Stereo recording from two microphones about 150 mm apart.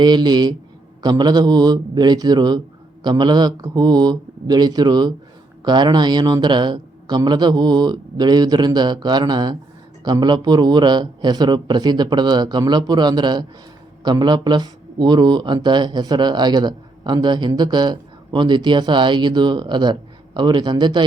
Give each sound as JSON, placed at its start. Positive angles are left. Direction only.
{"t": 0.0, "sound": "speech", "side_deg": -30}